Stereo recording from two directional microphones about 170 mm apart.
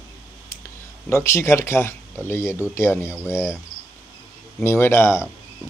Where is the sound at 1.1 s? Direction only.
15° left (ahead or behind).